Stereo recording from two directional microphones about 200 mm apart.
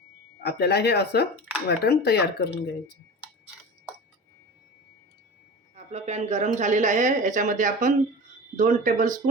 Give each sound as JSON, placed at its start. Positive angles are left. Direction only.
{"t": 0.4, "sound": "speech", "side_deg": 55}
{"t": 5.7, "sound": "a woman's voice", "side_deg": -35}